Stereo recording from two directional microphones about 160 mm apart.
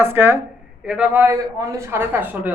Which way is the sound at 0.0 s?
15° right (ahead or behind).